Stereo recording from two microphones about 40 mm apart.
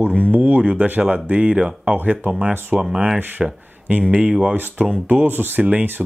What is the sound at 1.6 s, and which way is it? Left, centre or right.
Speech, right.